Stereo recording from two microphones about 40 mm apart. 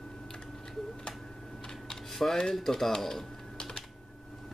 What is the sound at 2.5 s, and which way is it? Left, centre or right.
Speech, centre.